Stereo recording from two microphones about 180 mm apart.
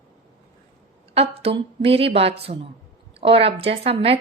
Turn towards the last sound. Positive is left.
turn(degrees=-35)  # may be behind; listen again after turning